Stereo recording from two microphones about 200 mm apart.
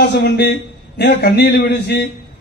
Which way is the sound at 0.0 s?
55° left (ahead or behind).